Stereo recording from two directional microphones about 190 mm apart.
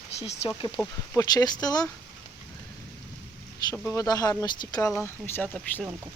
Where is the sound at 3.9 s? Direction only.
20° left (ahead or behind).